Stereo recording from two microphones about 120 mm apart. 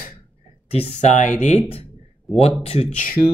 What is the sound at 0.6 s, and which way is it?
Speech, 55° left (ahead or behind).